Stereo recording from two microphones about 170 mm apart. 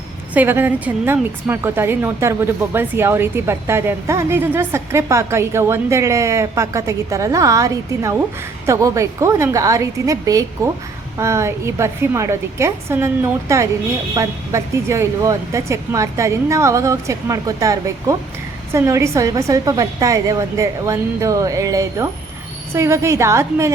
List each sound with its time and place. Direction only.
0.3 s a woman's voice: 10° right (ahead or behind)